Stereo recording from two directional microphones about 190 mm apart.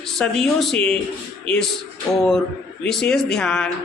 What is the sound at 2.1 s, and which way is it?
A man's voice, centre (ahead or behind).